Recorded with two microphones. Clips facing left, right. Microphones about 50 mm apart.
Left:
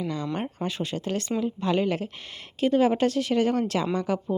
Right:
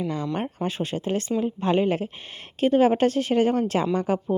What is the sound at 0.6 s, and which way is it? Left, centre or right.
Speech, right.